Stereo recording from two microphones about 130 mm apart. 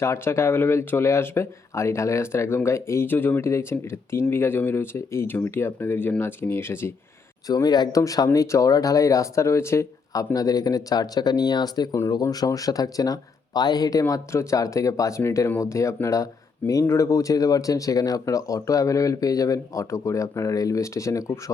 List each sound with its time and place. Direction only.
0.0 s speech: 20° left (ahead or behind)
7.4 s speech: 30° left (ahead or behind)